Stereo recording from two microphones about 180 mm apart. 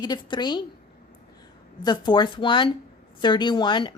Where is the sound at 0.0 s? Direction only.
25° left (ahead or behind).